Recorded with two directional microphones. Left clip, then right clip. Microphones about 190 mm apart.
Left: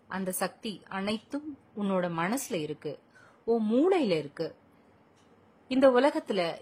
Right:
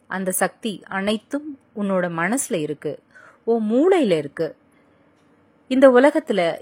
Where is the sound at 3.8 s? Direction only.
25° right (ahead or behind).